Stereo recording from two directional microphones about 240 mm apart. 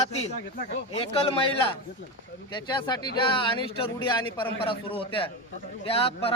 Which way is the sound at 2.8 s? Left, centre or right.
Centre.